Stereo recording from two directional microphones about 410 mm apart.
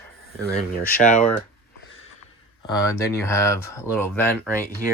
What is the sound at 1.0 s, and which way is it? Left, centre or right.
Speech, centre.